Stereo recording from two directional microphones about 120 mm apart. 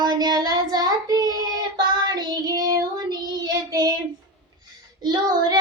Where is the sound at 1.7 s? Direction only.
35° right (ahead or behind).